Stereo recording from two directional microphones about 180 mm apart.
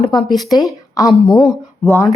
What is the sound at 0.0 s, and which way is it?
Speech, 25° left (ahead or behind).